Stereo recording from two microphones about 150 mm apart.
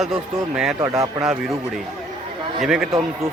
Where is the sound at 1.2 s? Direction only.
5° right (ahead or behind).